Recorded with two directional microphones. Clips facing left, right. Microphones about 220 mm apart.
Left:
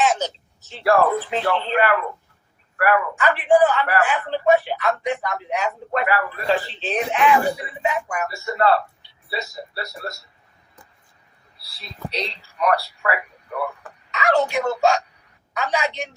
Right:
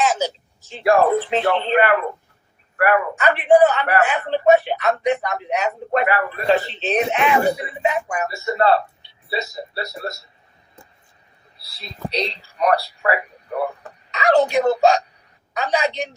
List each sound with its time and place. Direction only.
0.0 s a sound: centre (ahead or behind)
0.3 s a man's voice: 15° right (ahead or behind)
11.5 s speech: 20° right (ahead or behind)
12.1 s speech: 35° right (ahead or behind)
13.0 s a sound: 30° right (ahead or behind)
15.5 s a woman's voice: 35° right (ahead or behind)